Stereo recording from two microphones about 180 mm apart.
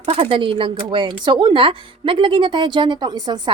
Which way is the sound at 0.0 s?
30° right (ahead or behind).